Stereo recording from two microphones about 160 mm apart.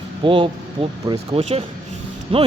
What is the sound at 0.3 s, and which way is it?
Speech, 30° right (ahead or behind).